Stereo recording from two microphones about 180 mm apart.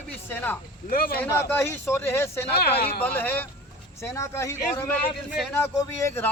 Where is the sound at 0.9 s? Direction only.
55° left (ahead or behind).